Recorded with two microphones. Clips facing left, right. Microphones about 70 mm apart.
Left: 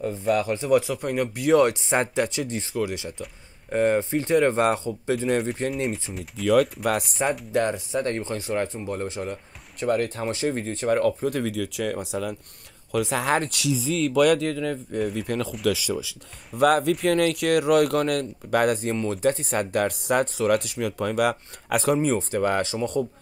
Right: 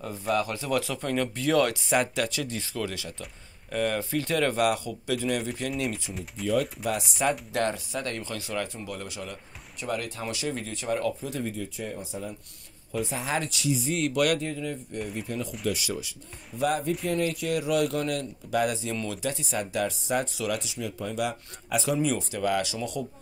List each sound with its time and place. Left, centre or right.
0.2 s speech: left
5.4 s speech: left
6.4 s speech: left
7.2 s speech: centre; by 10.9 s left
10.9 s speech: left
11.4 s speech: left
13.3 s speech: left
14.4 s speech: left